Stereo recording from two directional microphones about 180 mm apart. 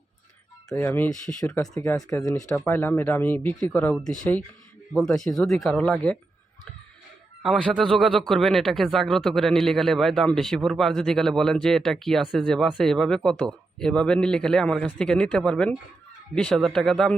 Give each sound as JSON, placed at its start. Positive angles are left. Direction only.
{"t": 0.7, "sound": "a man's voice", "side_deg": 10}
{"t": 7.4, "sound": "a man's voice", "side_deg": 0}